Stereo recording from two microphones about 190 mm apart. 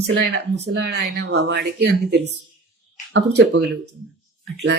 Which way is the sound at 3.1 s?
65° right (ahead or behind).